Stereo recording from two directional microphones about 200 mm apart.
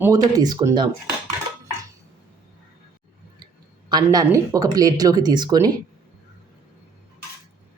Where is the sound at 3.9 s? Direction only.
20° right (ahead or behind).